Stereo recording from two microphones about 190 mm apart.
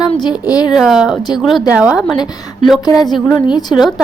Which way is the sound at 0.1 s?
25° left (ahead or behind).